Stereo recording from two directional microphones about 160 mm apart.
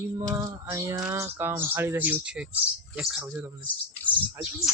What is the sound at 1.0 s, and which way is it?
A man's voice, 15° right (ahead or behind).